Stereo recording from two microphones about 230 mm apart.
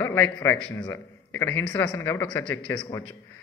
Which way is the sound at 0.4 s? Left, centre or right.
Centre.